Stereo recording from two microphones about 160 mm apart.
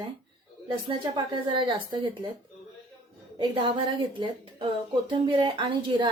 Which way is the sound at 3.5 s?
30° right (ahead or behind).